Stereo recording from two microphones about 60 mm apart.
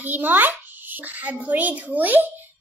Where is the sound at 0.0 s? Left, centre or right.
Right.